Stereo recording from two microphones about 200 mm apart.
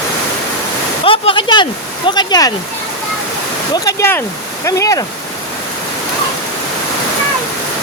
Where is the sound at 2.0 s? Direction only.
20° left (ahead or behind).